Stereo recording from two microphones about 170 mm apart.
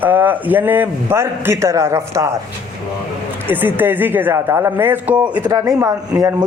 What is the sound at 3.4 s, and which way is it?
A man's voice, 10° right (ahead or behind).